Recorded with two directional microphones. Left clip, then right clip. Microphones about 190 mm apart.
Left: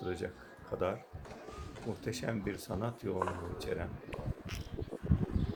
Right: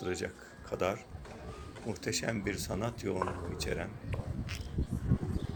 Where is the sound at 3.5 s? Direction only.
5° left (ahead or behind).